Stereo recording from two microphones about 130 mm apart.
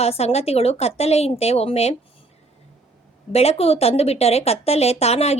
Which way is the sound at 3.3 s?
50° left (ahead or behind).